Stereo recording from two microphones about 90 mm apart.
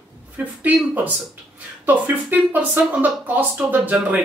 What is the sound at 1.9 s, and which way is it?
Speech, 15° right (ahead or behind).